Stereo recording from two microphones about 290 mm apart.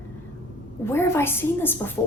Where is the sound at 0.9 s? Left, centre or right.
Centre.